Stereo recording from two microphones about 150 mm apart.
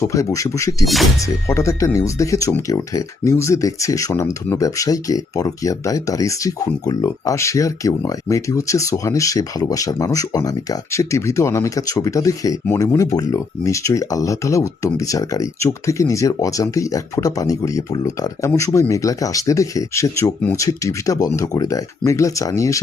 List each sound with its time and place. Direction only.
0.0 s speech: 20° left (ahead or behind)